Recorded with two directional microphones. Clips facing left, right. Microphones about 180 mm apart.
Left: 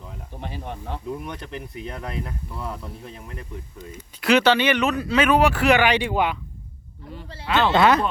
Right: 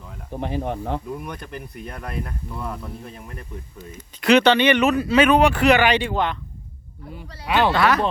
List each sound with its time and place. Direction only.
0.3 s speech: 55° right (ahead or behind)
1.3 s speech: 20° left (ahead or behind)
2.6 s speech: centre (ahead or behind)
4.8 s speech: 5° right (ahead or behind); by 6.3 s 10° left (ahead or behind)
7.2 s speech: 15° right (ahead or behind)
7.7 s speech: 25° left (ahead or behind)